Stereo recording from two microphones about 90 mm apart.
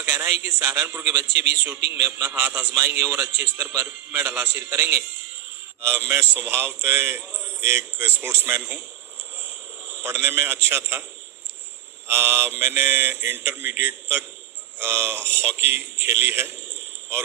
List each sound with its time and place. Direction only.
0.0 s a man's voice: 15° right (ahead or behind)
1.6 s mantra: 20° right (ahead or behind)
2.0 s a man's voice: 35° right (ahead or behind)
2.2 s mantra: 20° right (ahead or behind)
10.0 s mantra: 25° right (ahead or behind)
12.0 s mantra: 30° right (ahead or behind)